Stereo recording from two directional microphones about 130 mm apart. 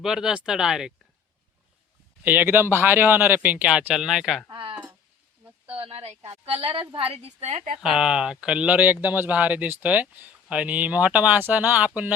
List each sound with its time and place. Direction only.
0.0 s speech: 5° right (ahead or behind)
2.2 s speech: 15° right (ahead or behind)
4.4 s a woman's voice: 40° right (ahead or behind)
7.8 s speech: 5° right (ahead or behind)